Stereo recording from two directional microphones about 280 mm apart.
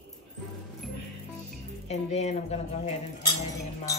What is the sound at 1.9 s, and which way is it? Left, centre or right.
Speech, left.